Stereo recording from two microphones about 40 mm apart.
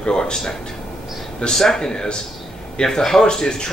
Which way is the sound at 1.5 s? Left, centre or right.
Centre.